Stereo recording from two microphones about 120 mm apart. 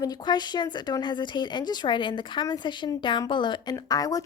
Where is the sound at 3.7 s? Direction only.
30° left (ahead or behind).